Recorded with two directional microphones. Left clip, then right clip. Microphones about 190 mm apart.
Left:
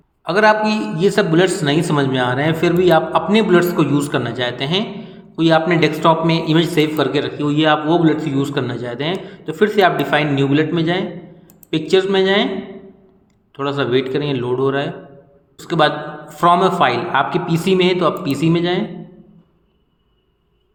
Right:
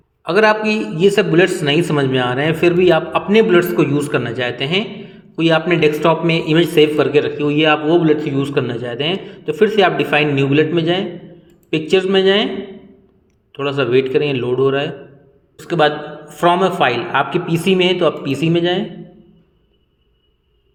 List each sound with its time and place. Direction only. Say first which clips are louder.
0.3 s speech: even; 30° right (ahead or behind)
13.5 s speech: right 2 dB; 25° right (ahead or behind)